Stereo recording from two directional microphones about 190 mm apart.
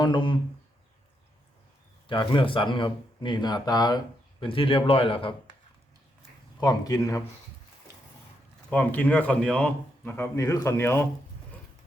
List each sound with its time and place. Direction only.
0.0 s speech: 25° left (ahead or behind)
2.0 s speech: 25° left (ahead or behind)
6.6 s speech: 20° left (ahead or behind)
8.7 s a man's voice: 10° left (ahead or behind)